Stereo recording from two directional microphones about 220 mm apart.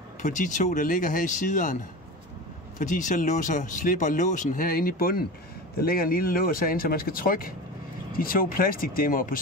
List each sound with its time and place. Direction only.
0.2 s speech: 35° left (ahead or behind)
2.8 s speech: 35° left (ahead or behind)